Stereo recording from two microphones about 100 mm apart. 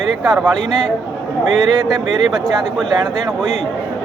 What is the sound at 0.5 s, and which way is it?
Speech, 5° left (ahead or behind).